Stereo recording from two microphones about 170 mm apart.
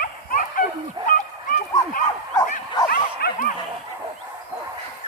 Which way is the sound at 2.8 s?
60° left (ahead or behind).